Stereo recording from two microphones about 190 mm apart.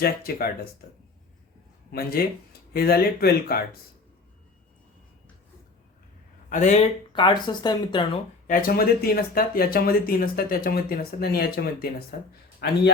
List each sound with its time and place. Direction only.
0.0 s speech: 55° left (ahead or behind)
1.9 s speech: 55° left (ahead or behind)
6.5 s speech: 40° left (ahead or behind)
7.1 s speech: 25° left (ahead or behind)
8.4 s a man's voice: 50° left (ahead or behind)